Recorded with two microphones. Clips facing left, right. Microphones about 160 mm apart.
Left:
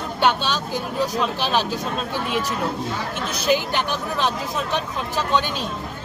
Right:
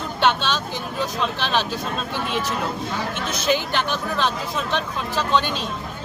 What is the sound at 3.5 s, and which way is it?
Speech, 10° left (ahead or behind).